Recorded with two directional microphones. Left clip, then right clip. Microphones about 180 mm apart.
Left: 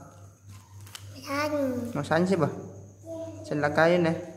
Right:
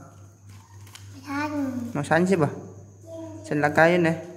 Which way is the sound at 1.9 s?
10° right (ahead or behind).